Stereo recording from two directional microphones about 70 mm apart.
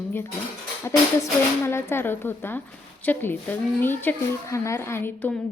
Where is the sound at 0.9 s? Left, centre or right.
Left.